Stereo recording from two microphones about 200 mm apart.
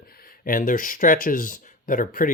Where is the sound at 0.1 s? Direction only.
45° left (ahead or behind).